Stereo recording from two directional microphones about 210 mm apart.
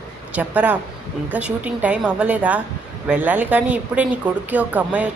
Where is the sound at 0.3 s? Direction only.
5° right (ahead or behind).